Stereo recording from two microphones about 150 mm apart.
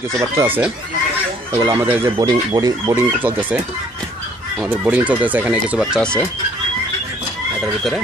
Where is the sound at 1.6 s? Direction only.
20° right (ahead or behind).